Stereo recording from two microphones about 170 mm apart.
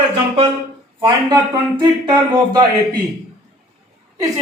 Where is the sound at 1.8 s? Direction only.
25° right (ahead or behind).